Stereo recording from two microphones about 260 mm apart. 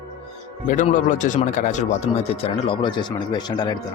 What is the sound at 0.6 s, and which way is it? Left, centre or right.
Speech, left.